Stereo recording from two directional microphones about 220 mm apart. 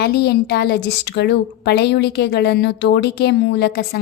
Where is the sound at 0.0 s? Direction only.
45° left (ahead or behind).